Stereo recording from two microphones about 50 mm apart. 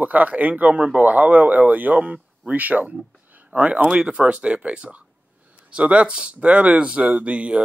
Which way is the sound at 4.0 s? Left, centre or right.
Centre.